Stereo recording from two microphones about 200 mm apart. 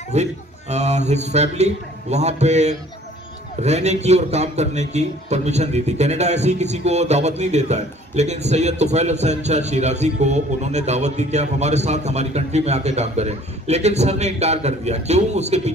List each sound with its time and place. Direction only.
0.1 s a man's voice: 35° right (ahead or behind)